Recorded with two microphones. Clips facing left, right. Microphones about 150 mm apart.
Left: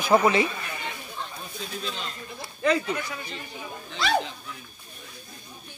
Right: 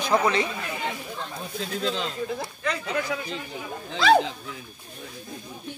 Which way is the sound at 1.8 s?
90° right.